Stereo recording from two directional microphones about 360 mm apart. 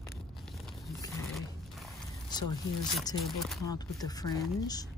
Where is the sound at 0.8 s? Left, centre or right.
Centre.